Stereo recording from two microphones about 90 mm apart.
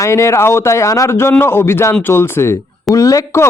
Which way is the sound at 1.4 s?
25° left (ahead or behind).